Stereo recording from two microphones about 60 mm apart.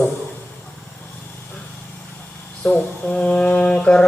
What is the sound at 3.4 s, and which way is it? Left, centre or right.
Mantra, left.